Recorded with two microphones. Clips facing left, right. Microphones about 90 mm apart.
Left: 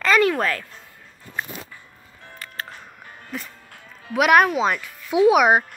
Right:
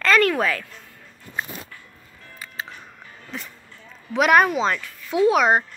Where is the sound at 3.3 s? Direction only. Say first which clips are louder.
Left 2 dB; 5° left (ahead or behind).